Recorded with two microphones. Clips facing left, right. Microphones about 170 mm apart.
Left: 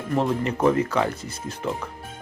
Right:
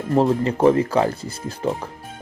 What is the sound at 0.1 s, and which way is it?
Speech, 35° right (ahead or behind).